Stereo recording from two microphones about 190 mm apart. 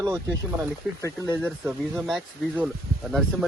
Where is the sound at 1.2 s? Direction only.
15° right (ahead or behind).